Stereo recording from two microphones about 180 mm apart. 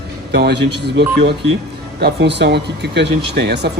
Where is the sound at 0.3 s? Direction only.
70° right (ahead or behind).